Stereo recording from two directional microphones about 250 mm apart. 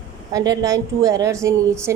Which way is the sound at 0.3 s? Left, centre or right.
Centre.